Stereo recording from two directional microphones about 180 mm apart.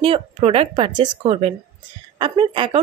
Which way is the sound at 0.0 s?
30° right (ahead or behind).